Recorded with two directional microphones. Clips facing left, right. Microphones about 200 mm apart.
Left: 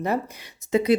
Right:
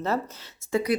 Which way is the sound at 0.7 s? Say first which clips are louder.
Left 5 dB; 25° left (ahead or behind).